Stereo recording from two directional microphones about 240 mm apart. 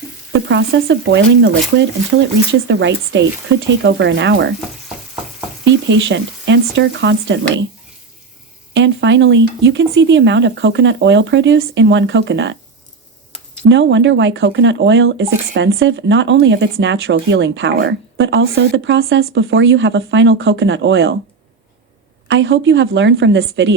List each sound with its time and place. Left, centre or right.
0.3 s speech: right
5.6 s speech: right
8.7 s speech: right
13.7 s speech: right
22.3 s speech: right